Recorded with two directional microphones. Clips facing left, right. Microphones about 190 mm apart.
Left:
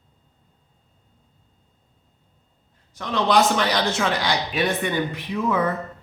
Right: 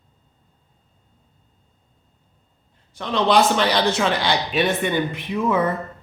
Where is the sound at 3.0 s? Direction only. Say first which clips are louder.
Right 2 dB; 30° right (ahead or behind).